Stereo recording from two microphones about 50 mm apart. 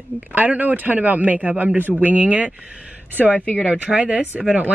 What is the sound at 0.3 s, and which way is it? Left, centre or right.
A man's voice, right.